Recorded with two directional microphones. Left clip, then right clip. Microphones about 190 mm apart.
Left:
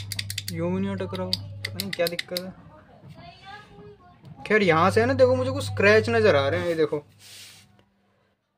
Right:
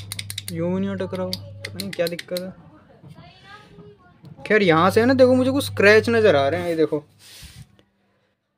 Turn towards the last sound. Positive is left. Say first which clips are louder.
# right 3 dB
turn(degrees=-20)  # may be behind; listen again after turning